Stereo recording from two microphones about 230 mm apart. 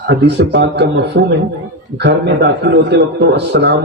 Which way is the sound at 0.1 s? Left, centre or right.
Right.